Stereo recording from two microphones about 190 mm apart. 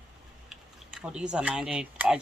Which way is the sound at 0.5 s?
5° right (ahead or behind).